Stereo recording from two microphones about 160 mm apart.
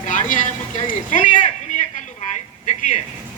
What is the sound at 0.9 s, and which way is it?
Speech, 55° left (ahead or behind).